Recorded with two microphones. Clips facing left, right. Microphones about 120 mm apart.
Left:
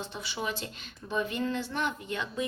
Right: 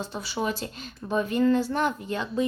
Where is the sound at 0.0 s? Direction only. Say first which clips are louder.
Right 6 dB; 40° right (ahead or behind).